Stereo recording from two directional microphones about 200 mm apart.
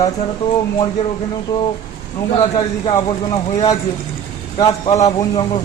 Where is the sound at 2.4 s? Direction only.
20° left (ahead or behind).